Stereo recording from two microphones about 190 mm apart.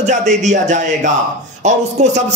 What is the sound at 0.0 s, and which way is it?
A man's voice, 40° right (ahead or behind).